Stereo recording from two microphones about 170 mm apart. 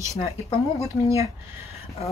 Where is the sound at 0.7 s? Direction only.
20° right (ahead or behind).